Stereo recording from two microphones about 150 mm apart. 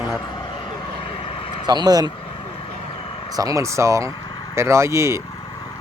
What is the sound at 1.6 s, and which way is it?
Speech, 30° right (ahead or behind).